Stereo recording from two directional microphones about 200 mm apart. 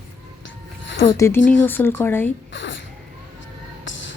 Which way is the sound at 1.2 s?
10° left (ahead or behind).